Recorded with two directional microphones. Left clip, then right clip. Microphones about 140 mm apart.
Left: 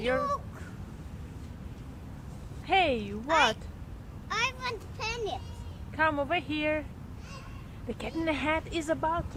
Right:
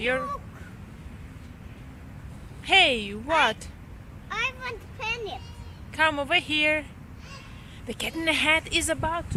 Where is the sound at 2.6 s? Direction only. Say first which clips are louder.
Right 6 dB; 35° right (ahead or behind).